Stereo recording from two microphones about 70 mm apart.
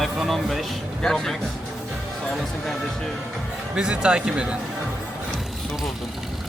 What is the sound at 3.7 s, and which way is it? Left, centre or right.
Speech, centre.